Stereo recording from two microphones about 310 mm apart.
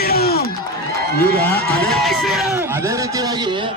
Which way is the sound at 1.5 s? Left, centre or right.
Centre.